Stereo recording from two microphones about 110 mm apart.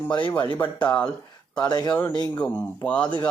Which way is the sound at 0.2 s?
45° left (ahead or behind).